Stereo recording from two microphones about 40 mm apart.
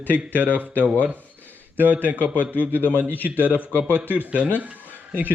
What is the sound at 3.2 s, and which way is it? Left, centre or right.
A man's voice, right.